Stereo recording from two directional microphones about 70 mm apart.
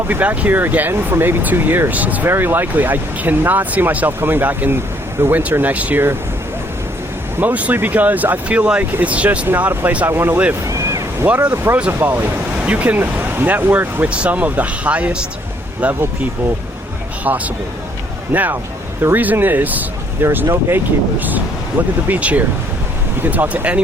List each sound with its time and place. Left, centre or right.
0.1 s speech: right
7.3 s speech: right
10.1 s speech: right
10.7 s a sound: right
11.5 s speech: right
12.0 s speech: right
17.2 s speech: right